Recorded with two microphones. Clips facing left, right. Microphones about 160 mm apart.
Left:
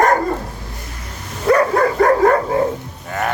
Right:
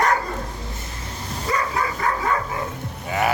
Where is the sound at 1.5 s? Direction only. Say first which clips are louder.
Left 11 dB; 65° left (ahead or behind).